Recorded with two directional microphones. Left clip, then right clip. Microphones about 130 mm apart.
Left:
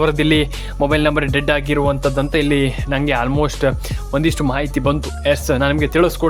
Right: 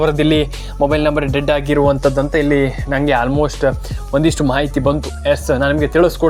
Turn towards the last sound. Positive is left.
turn(degrees=5)  # may be behind; listen again after turning